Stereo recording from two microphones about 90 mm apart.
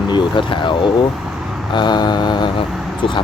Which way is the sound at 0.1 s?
60° left (ahead or behind).